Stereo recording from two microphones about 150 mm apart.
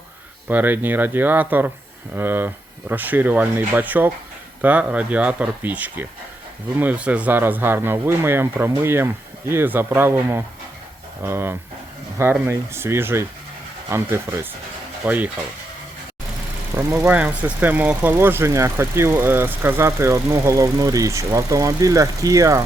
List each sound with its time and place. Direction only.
0.4 s speech: 10° right (ahead or behind)
16.7 s speech: 15° right (ahead or behind)